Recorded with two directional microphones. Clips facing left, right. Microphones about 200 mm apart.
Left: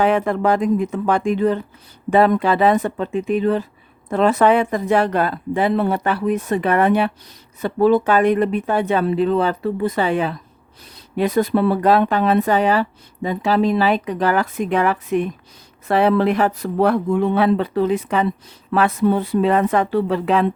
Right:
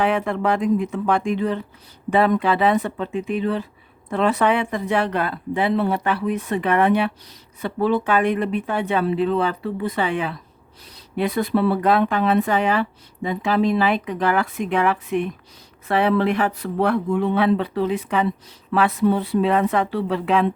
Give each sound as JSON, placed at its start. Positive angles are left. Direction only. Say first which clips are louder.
{"t": 0.0, "sound": "a woman's voice", "louder": "left 3 dB", "side_deg": 40}